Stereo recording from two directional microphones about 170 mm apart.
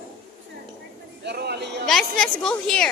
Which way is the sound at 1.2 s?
75° right (ahead or behind).